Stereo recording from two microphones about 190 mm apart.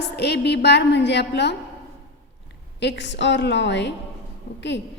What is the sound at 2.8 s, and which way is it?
A woman's voice, 65° left (ahead or behind).